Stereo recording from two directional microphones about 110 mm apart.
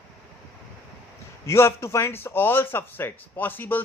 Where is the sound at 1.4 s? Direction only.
25° left (ahead or behind).